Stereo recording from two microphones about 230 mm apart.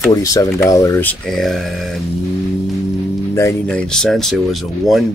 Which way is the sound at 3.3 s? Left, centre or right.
Centre.